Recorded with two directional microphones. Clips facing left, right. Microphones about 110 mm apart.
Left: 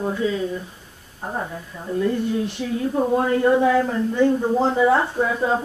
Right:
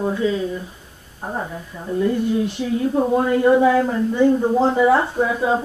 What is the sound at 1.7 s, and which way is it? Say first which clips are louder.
Speech: right 2 dB; 20° right (ahead or behind).